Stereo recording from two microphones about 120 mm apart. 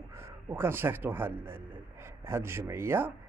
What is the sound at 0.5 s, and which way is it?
Speech, 20° right (ahead or behind).